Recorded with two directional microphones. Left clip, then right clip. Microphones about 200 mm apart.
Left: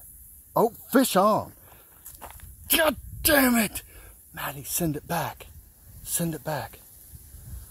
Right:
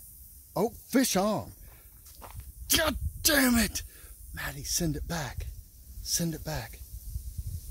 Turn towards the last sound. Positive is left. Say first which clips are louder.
# left 6 dB
turn(degrees=-5)  # may be behind; listen again after turning